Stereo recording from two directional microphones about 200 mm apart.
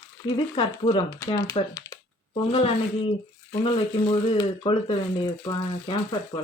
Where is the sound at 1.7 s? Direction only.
15° left (ahead or behind).